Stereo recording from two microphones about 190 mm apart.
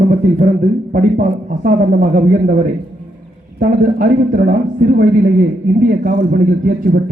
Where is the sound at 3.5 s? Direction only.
50° right (ahead or behind).